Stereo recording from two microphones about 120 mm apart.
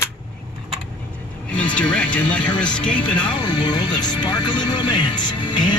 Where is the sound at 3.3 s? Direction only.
35° left (ahead or behind).